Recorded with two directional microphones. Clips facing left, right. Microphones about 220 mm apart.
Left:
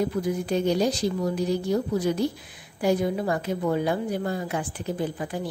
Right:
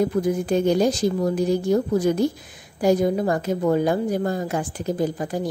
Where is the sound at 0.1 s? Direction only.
50° right (ahead or behind).